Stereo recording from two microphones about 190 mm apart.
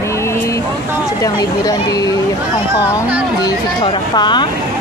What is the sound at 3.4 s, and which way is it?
Speech, 20° left (ahead or behind).